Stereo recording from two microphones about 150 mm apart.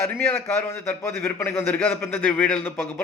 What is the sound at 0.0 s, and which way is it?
A man's voice, 15° left (ahead or behind).